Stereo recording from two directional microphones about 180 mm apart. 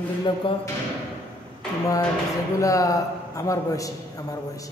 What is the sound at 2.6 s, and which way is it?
A man's voice, 20° left (ahead or behind).